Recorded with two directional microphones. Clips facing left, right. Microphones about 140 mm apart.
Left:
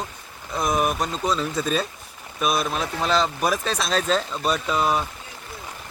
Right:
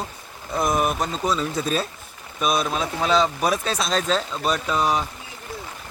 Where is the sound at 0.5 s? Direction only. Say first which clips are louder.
Right 1 dB; centre (ahead or behind).